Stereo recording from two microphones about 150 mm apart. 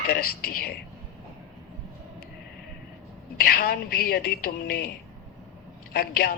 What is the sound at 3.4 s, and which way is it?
A man's voice, 80° left.